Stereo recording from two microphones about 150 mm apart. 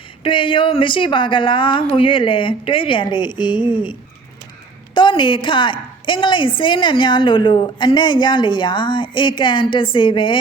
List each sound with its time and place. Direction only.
0.2 s a woman's voice: 35° left (ahead or behind)
4.9 s a woman's voice: 35° left (ahead or behind)